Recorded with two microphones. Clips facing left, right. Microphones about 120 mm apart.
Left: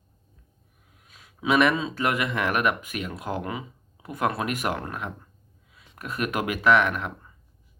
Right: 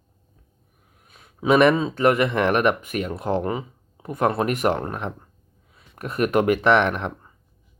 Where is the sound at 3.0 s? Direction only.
30° right (ahead or behind).